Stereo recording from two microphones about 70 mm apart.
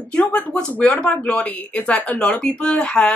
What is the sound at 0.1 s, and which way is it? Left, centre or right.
Speech, centre.